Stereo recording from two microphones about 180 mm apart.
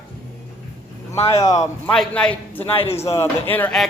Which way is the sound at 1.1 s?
35° left (ahead or behind).